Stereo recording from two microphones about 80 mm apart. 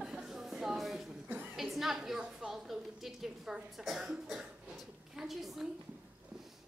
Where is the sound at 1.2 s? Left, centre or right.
Right.